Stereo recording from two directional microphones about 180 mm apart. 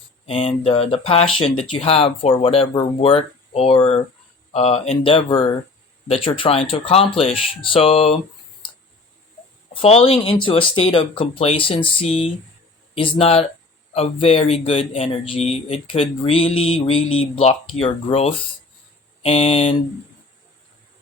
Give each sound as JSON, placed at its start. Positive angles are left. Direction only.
{"t": 0.3, "sound": "speech", "side_deg": 30}
{"t": 9.7, "sound": "speech", "side_deg": 30}